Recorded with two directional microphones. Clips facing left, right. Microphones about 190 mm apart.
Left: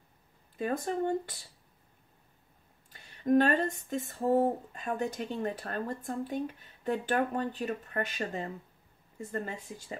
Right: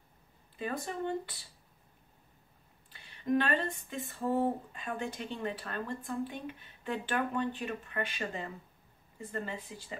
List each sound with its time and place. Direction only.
0.6 s speech: 45° left (ahead or behind)
2.9 s speech: 45° left (ahead or behind)